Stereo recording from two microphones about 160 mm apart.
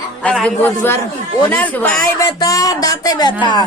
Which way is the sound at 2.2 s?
25° left (ahead or behind).